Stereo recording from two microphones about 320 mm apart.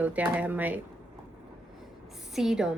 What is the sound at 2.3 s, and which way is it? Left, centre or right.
Speech, centre.